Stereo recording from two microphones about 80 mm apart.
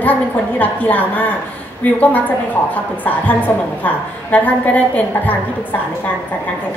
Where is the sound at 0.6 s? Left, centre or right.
Left.